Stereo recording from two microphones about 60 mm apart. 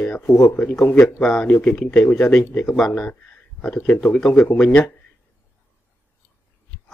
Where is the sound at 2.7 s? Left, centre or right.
Centre.